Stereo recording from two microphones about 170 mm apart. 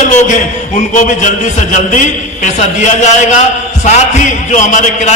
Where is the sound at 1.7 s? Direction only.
45° left (ahead or behind).